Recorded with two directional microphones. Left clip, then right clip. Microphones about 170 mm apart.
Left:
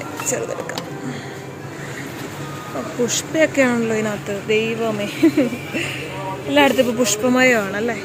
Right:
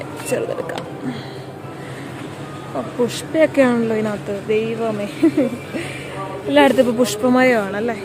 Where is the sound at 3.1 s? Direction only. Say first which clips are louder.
Right 1 dB; 15° right (ahead or behind).